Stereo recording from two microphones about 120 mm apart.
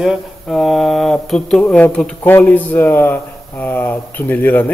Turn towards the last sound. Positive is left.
turn(degrees=15)  # may be behind; listen again after turning